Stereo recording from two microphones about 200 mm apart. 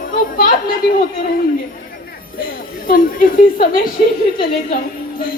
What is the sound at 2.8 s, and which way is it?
A woman's voice, 45° left (ahead or behind).